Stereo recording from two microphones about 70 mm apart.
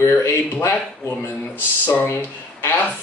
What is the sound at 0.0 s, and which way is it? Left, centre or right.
Speech, left.